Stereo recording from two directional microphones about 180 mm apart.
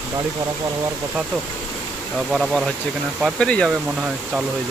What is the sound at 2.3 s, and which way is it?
Speech, centre (ahead or behind).